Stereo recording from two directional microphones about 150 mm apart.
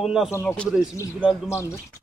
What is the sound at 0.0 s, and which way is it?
Speech, 5° right (ahead or behind).